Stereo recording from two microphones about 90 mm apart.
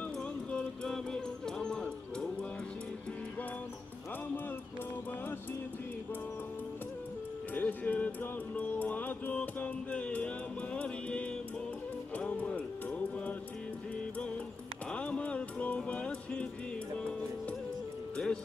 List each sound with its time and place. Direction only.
0.5 s music: 5° left (ahead or behind)
7.5 s music: 20° left (ahead or behind)
14.9 s music: 15° left (ahead or behind)
18.1 s music: 10° left (ahead or behind)